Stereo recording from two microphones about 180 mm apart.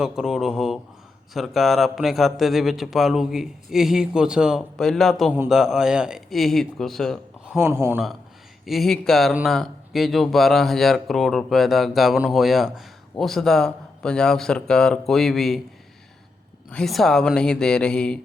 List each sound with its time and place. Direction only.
0.0 s speech: centre (ahead or behind)
7.7 s a man's voice: 15° right (ahead or behind)
8.6 s speech: centre (ahead or behind)
16.7 s speech: centre (ahead or behind)